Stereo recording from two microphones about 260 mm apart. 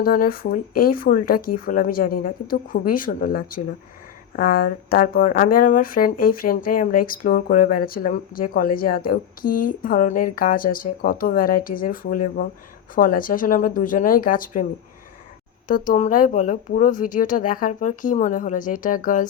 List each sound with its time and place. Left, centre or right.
0.0 s speech: left
15.6 s speech: left